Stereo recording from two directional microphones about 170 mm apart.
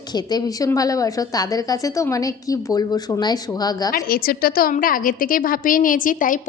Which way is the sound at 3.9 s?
60° left (ahead or behind).